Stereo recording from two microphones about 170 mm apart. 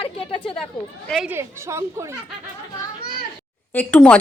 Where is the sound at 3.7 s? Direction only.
5° left (ahead or behind).